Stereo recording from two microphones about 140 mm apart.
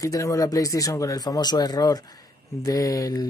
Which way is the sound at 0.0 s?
25° left (ahead or behind).